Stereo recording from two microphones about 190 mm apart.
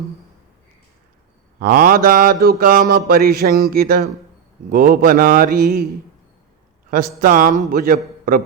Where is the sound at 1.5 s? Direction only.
50° right (ahead or behind).